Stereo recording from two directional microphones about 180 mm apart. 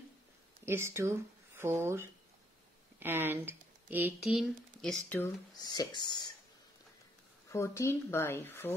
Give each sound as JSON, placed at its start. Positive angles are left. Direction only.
{"t": 0.7, "sound": "speech", "side_deg": -15}
{"t": 5.1, "sound": "speech", "side_deg": 15}
{"t": 7.4, "sound": "speech", "side_deg": 15}